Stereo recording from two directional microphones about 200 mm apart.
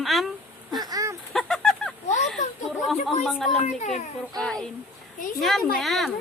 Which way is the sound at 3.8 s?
35° left (ahead or behind).